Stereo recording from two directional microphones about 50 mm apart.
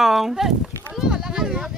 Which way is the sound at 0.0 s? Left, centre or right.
Centre.